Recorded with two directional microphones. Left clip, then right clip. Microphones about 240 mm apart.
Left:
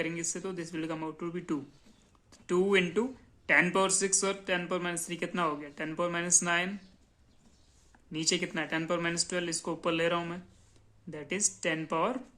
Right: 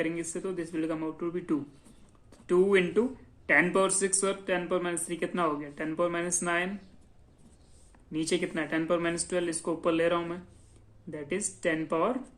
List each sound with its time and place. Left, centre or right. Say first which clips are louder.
0.0 s speech: right 3 dB; left
8.1 s speech: right 1 dB; left